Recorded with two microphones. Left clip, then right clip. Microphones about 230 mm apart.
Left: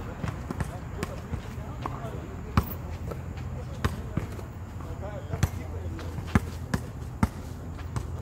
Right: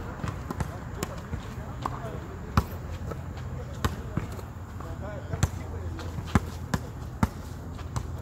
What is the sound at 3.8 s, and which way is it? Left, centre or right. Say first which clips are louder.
Basketball bounce: right 1 dB; centre.